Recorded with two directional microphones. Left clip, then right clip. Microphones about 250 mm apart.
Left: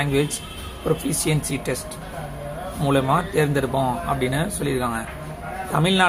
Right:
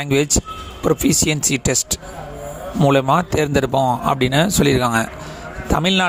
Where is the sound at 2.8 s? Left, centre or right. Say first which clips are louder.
Right 5 dB; right.